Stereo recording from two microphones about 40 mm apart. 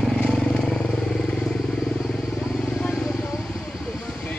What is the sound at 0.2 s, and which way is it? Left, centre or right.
Vehicle, centre.